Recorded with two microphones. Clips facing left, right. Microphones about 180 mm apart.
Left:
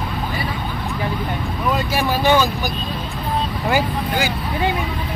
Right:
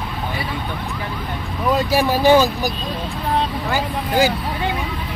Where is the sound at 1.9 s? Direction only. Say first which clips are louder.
Right 4 dB; 35° right (ahead or behind).